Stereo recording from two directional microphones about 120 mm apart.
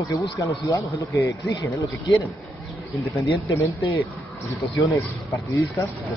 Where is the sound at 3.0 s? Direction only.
25° left (ahead or behind).